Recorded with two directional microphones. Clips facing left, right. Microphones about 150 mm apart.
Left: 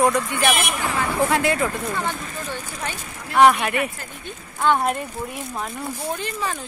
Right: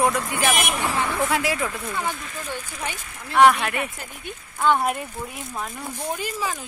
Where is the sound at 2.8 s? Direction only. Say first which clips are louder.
Left 1 dB; 15° right (ahead or behind).